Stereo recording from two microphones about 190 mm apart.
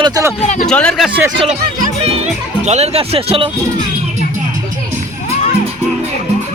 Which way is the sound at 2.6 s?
35° right (ahead or behind).